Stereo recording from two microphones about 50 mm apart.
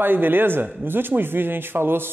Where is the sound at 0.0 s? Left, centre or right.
Right.